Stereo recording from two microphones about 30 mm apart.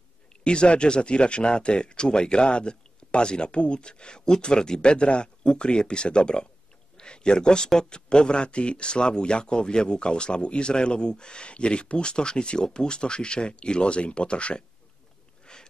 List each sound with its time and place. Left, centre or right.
0.4 s speech: left
4.9 s speech: left
15.5 s a sound: left